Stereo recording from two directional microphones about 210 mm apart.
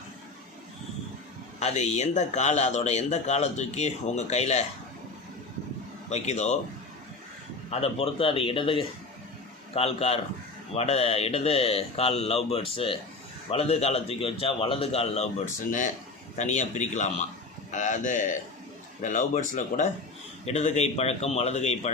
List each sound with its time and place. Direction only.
1.5 s a man's voice: 30° left (ahead or behind)
6.1 s a man's voice: 30° left (ahead or behind)
7.7 s speech: 30° left (ahead or behind)
16.3 s a man's voice: 35° left (ahead or behind)